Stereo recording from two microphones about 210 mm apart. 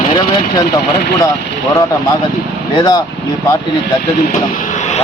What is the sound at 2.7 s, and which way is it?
Speech, 20° left (ahead or behind).